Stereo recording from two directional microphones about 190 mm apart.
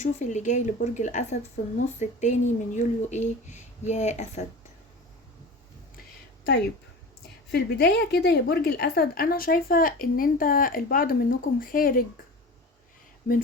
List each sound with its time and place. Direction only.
0.0 s speech: 40° left (ahead or behind)
7.5 s a woman's voice: 60° left (ahead or behind)